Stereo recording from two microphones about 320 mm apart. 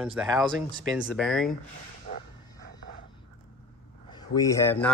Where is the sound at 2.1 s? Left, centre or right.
Left.